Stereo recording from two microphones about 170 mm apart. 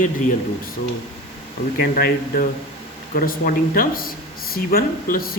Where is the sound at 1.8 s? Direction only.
60° left (ahead or behind).